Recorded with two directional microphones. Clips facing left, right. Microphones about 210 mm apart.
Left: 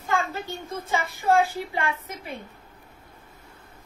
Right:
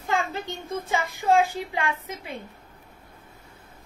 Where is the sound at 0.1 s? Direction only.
20° right (ahead or behind).